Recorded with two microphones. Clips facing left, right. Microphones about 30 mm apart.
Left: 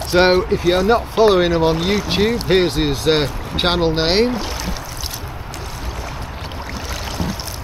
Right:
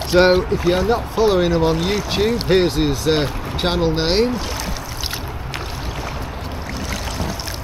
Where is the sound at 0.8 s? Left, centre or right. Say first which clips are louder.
Left 3 dB; left.